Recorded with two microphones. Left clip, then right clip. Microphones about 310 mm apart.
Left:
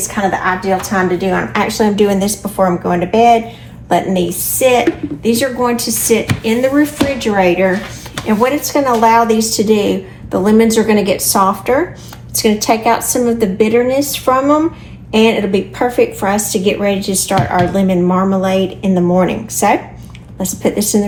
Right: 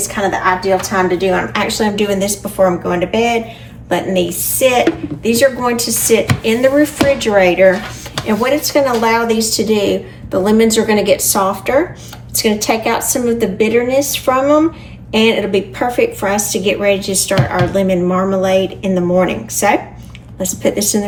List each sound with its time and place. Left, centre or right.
0.1 s speech: centre